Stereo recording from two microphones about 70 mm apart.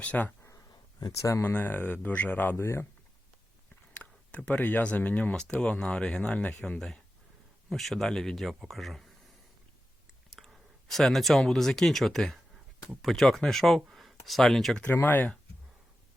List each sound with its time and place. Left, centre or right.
0.0 s speech: left
0.7 s a sound: left
1.2 s speech: left
1.5 s speech: left
2.6 s speech: left
3.9 s speech: centre
7.7 s speech: centre
10.2 s speech: centre
14.8 s speech: left